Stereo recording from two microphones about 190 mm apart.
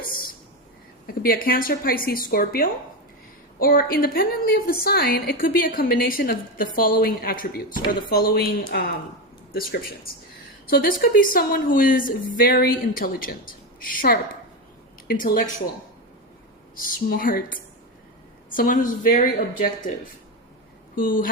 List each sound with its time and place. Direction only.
0.0 s a sound: 50° left (ahead or behind)
1.0 s a woman's voice: 50° left (ahead or behind)
16.7 s a woman's voice: 50° left (ahead or behind)
20.9 s a woman's voice: 45° left (ahead or behind)